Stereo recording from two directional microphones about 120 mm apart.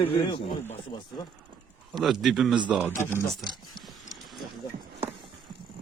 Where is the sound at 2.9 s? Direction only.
20° left (ahead or behind).